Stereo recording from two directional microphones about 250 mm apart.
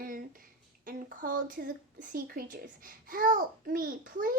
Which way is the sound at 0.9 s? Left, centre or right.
Right.